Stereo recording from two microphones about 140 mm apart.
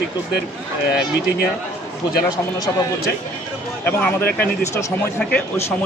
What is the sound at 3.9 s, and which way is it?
Speech, 15° left (ahead or behind).